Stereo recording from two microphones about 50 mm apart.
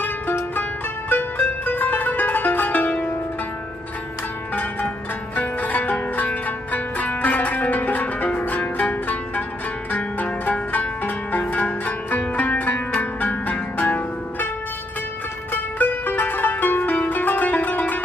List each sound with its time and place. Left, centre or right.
0.0 s music: left
4.6 s zither: left
13.2 s music: left
15.5 s music: left
16.9 s zither: left